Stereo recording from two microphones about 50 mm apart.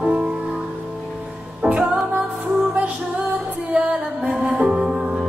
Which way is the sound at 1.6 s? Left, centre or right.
Right.